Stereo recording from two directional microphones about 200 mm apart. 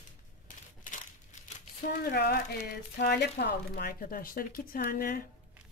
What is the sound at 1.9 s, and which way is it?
Speech, 50° left (ahead or behind).